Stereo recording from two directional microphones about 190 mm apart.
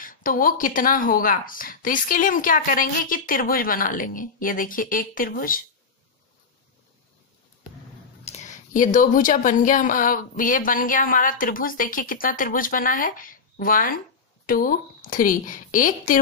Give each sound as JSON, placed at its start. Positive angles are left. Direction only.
{"t": 0.0, "sound": "a woman's voice", "side_deg": 45}
{"t": 8.3, "sound": "a woman's voice", "side_deg": 40}